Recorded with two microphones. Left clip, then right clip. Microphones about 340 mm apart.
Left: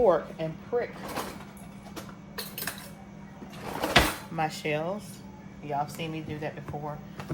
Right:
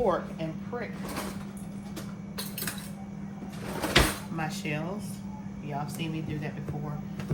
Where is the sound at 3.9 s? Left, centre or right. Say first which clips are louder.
Left 2 dB; left.